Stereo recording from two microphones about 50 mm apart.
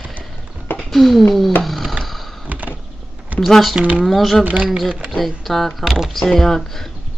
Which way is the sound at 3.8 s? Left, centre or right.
Right.